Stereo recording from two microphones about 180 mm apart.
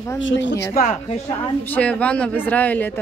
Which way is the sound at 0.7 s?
50° left (ahead or behind).